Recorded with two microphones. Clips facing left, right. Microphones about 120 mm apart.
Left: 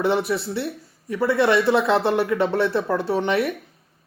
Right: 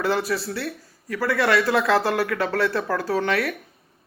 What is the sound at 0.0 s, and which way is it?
Speech, 25° left (ahead or behind).